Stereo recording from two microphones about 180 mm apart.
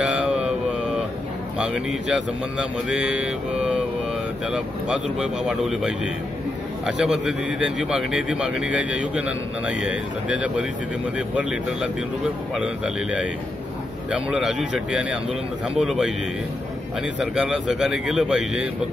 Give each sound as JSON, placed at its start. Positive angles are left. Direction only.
{"t": 0.0, "sound": "mantra", "side_deg": -5}
{"t": 1.7, "sound": "a man's voice", "side_deg": 0}
{"t": 2.9, "sound": "mantra", "side_deg": -5}
{"t": 4.5, "sound": "a man's voice", "side_deg": -5}
{"t": 7.0, "sound": "a man's voice", "side_deg": -5}
{"t": 17.2, "sound": "a man's voice", "side_deg": -5}